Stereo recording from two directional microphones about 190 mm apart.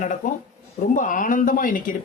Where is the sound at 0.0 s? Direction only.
40° left (ahead or behind).